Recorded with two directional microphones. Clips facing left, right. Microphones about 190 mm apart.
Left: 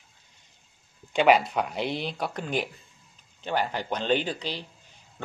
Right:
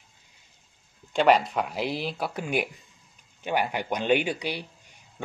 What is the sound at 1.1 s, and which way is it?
Speech, centre (ahead or behind).